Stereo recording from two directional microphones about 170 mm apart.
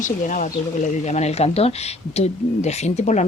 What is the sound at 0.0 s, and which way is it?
A woman's voice, 50° left (ahead or behind).